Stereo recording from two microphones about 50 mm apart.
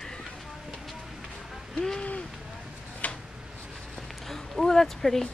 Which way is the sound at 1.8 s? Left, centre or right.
Centre.